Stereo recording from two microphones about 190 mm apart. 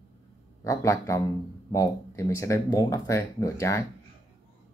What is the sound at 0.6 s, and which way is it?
Speech, 15° left (ahead or behind).